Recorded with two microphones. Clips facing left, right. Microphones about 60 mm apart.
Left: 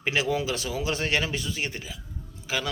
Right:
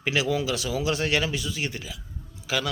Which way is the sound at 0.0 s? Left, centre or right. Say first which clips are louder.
Right 1 dB; left.